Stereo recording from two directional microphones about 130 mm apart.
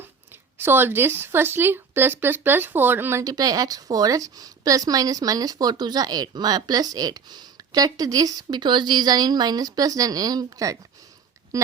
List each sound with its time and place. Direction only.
0.6 s speech: 15° right (ahead or behind)